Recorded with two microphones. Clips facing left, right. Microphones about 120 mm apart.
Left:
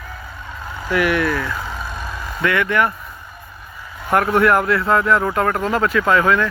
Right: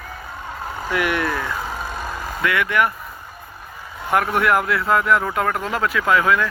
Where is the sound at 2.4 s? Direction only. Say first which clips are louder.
Left 2 dB; 5° right (ahead or behind).